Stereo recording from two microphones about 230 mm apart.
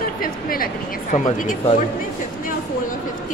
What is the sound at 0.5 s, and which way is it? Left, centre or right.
Speech, left.